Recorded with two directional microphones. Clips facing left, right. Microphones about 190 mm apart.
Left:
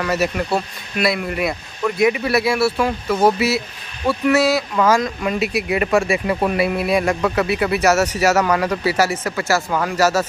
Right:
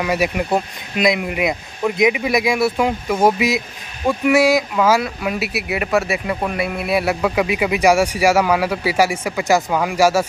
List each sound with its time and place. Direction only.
0.0 s speech: 15° right (ahead or behind)